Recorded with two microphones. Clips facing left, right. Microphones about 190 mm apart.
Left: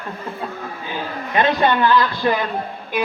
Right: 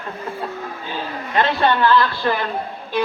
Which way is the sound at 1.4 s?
15° left (ahead or behind).